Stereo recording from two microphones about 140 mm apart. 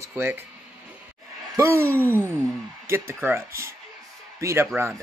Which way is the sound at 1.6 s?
20° right (ahead or behind).